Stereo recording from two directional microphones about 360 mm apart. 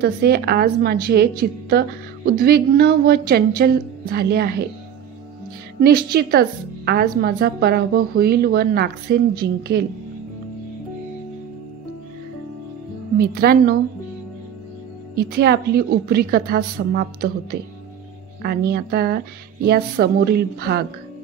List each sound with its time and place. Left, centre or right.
0.0 s a woman's voice: right
5.8 s a woman's voice: right
13.2 s a woman's voice: right
15.3 s a woman's voice: right